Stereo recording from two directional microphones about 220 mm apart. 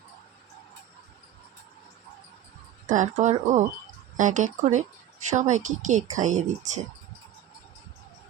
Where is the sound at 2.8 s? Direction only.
35° right (ahead or behind).